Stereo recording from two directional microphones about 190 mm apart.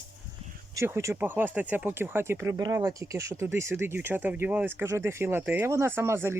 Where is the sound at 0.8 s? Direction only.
15° right (ahead or behind).